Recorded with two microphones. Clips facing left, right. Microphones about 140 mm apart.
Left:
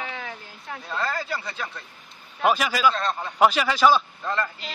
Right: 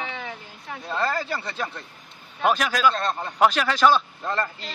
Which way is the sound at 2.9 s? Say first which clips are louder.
Right 1 dB; 40° right (ahead or behind).